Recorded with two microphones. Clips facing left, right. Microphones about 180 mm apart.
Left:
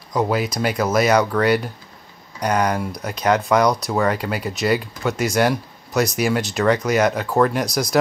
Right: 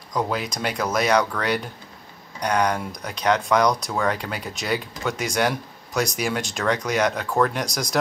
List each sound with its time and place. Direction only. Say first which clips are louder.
0.1 s speech: left 5 dB; 5° left (ahead or behind)